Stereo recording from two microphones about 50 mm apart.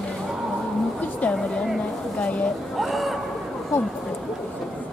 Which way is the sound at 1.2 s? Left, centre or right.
Left.